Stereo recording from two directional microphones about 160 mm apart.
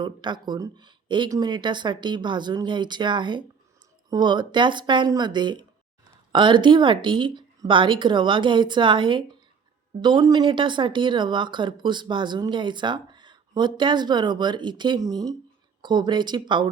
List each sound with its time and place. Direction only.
0.0 s a woman's voice: 30° right (ahead or behind)